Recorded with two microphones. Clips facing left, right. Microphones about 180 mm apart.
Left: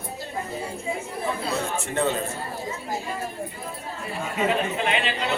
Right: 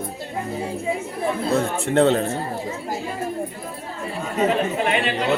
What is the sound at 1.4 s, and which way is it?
Speech, 55° right (ahead or behind).